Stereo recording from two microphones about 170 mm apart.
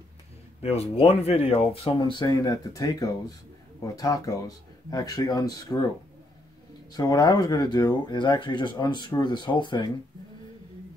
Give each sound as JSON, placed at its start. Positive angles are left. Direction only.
{"t": 0.6, "sound": "speech", "side_deg": 35}
{"t": 6.9, "sound": "speech", "side_deg": 25}